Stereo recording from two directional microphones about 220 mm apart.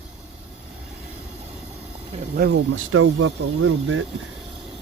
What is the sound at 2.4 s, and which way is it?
Speech, 60° right (ahead or behind).